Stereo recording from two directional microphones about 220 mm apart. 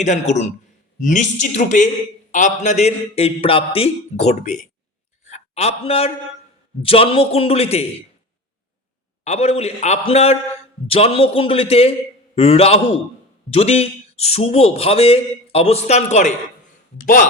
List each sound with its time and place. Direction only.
0.0 s a man's voice: 30° left (ahead or behind)
9.2 s a man's voice: 30° left (ahead or behind)